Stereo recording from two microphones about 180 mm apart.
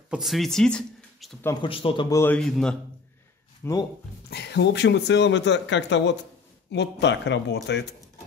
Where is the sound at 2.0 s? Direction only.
15° left (ahead or behind).